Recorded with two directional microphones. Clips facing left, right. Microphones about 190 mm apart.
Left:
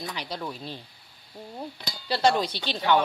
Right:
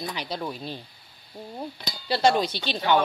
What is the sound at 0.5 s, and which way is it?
Speech, 15° right (ahead or behind).